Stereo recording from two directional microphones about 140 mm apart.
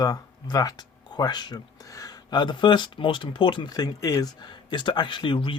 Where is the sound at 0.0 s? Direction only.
30° left (ahead or behind).